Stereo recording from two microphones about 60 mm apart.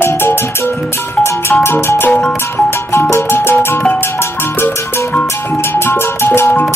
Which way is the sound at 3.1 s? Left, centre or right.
Left.